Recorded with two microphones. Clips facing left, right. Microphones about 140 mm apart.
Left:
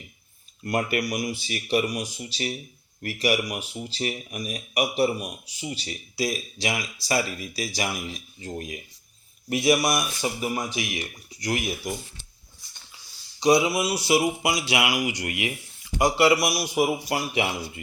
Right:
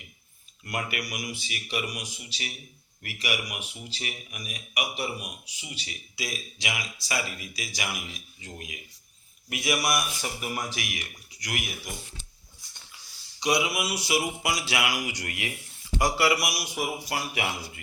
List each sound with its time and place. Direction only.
0.6 s a man's voice: 40° left (ahead or behind)
9.5 s speech: 25° left (ahead or behind)
13.4 s speech: 30° left (ahead or behind)